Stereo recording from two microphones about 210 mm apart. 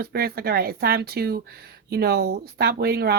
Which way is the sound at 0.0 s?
50° right (ahead or behind).